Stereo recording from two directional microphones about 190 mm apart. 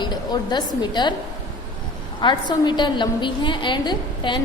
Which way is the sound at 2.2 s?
25° left (ahead or behind).